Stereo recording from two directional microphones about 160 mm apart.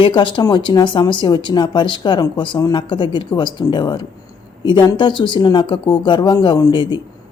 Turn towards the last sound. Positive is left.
turn(degrees=30)  # may be behind; listen again after turning